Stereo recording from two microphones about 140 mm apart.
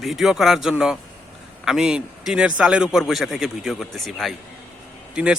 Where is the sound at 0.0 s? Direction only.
Centre (ahead or behind).